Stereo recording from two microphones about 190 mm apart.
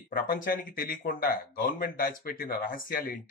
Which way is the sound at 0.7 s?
45° left (ahead or behind).